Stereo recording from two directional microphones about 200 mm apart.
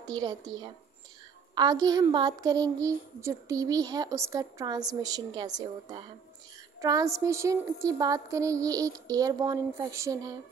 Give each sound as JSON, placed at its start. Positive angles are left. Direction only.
{"t": 0.0, "sound": "a woman's voice", "side_deg": -20}
{"t": 1.5, "sound": "a woman's voice", "side_deg": -20}